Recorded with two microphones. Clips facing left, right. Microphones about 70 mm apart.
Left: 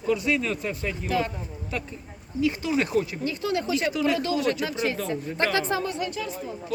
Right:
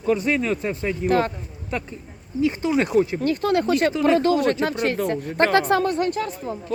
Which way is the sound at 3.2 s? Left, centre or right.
Right.